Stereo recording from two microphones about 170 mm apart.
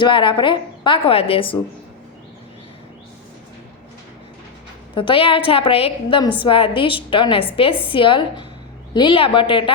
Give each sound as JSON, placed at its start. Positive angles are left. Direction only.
{"t": 0.0, "sound": "a woman's voice", "side_deg": 30}
{"t": 4.9, "sound": "a woman's voice", "side_deg": 30}